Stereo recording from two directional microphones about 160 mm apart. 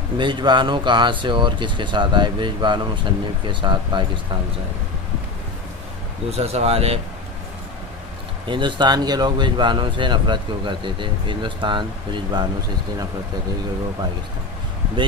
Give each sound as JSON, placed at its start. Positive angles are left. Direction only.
{"t": 0.2, "sound": "speech", "side_deg": -30}
{"t": 6.3, "sound": "speech", "side_deg": -40}
{"t": 8.5, "sound": "speech", "side_deg": -30}